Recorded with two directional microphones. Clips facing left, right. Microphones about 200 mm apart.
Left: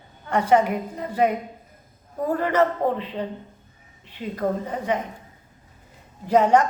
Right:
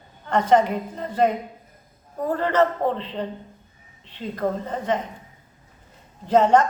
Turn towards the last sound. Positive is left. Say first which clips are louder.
# right 1 dB
turn(degrees=10)  # may be behind; listen again after turning